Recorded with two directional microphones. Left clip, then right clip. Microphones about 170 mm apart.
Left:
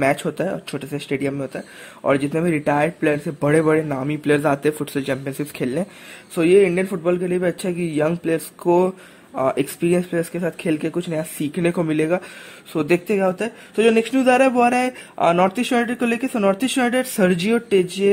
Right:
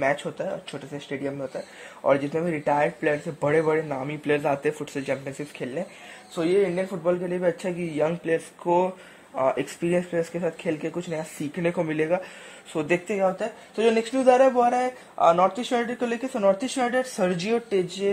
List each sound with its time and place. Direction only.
0.0 s speech: 15° left (ahead or behind); by 18.1 s centre (ahead or behind)